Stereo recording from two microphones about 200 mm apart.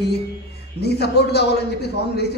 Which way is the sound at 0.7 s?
55° left (ahead or behind).